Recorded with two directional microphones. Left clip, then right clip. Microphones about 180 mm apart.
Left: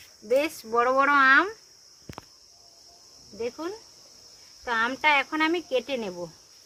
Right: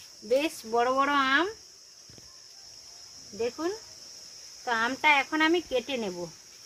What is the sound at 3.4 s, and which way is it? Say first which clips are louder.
Speech: right 2 dB; 40° right (ahead or behind).